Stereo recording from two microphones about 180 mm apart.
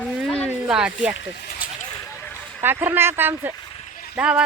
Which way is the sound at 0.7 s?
5° right (ahead or behind).